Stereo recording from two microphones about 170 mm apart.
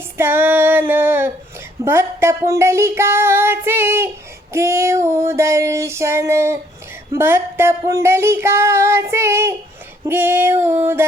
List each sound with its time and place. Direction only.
0.2 s music: 15° right (ahead or behind)